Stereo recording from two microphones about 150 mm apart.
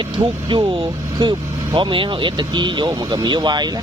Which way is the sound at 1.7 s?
35° right (ahead or behind).